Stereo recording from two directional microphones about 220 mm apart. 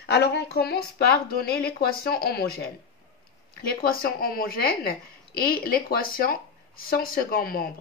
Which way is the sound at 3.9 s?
40° left (ahead or behind).